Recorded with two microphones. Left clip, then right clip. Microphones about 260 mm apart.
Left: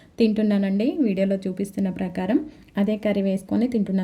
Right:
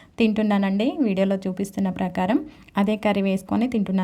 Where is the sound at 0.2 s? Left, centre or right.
Right.